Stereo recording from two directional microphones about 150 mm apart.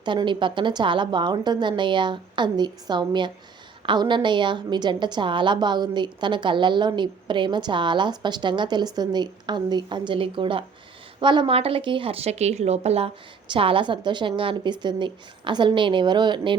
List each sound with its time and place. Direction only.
0.0 s a woman's voice: 30° right (ahead or behind)